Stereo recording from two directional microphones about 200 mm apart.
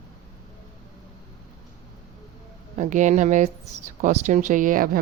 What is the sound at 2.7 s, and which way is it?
A woman's voice, 40° right (ahead or behind).